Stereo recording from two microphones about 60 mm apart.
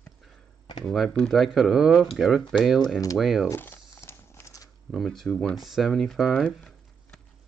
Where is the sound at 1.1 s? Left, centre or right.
Centre.